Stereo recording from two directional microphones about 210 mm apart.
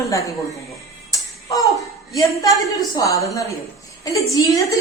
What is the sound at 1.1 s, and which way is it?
Music, 15° left (ahead or behind).